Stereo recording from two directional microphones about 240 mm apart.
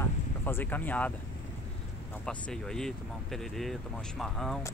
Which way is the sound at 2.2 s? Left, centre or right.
Centre.